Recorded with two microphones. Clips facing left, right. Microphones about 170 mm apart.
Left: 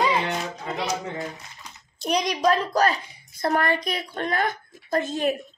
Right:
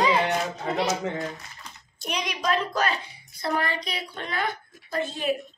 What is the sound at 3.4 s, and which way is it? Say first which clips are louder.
Speech: left 5 dB; 50° left (ahead or behind).